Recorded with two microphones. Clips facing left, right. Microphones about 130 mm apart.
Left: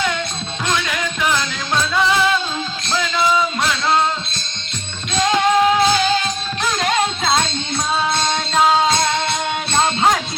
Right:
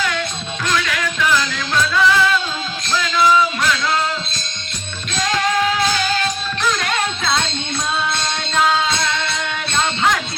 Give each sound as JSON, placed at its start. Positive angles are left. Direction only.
{"t": 0.7, "sound": "music", "side_deg": 20}
{"t": 5.2, "sound": "music", "side_deg": 25}
{"t": 8.5, "sound": "music", "side_deg": 30}